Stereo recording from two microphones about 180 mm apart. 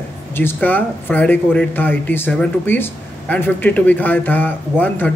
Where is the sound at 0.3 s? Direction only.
10° left (ahead or behind).